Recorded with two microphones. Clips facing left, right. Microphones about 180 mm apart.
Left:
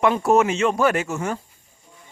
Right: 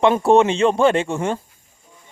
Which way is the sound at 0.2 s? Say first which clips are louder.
Right 4 dB; 30° right (ahead or behind).